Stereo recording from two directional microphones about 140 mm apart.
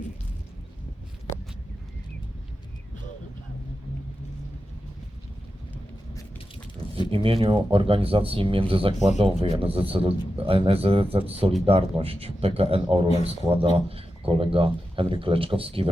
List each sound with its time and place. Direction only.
7.1 s a man's voice: 40° right (ahead or behind)